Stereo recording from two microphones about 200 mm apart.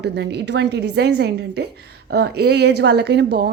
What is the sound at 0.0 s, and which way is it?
A woman's voice, 55° right (ahead or behind).